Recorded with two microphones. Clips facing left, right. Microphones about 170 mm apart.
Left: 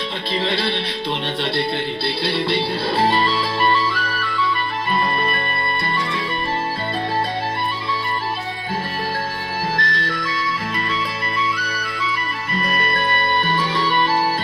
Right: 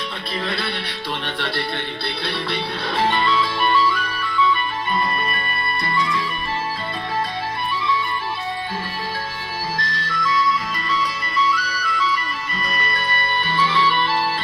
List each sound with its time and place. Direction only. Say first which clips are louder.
0.3 s music: left 5 dB; 30° left (ahead or behind)
9.7 s music: left 3 dB; 55° left (ahead or behind)
11.5 s music: right 2 dB; 55° left (ahead or behind)